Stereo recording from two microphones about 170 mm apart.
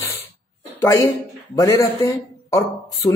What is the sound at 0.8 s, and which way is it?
A man's voice, 15° left (ahead or behind).